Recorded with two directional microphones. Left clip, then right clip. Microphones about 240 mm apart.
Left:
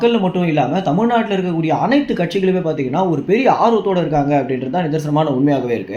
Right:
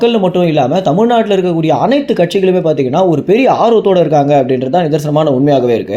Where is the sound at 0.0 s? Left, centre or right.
Right.